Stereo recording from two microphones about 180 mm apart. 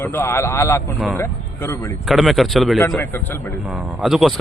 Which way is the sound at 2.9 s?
10° left (ahead or behind).